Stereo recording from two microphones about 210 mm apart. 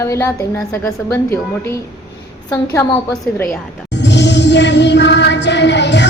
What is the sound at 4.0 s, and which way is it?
Music, 55° left (ahead or behind).